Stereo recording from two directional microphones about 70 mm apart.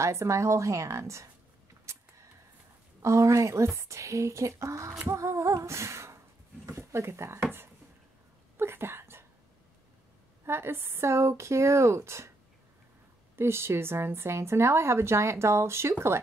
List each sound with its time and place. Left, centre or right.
0.0 s a woman's voice: right
1.9 s a sound: right
3.0 s a woman's voice: right
5.0 s a sound: right
6.8 s speech: right
8.5 s whispering: right
10.4 s speech: right
13.4 s speech: right